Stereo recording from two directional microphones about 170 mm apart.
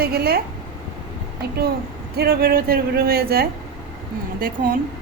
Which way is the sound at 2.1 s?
65° right (ahead or behind).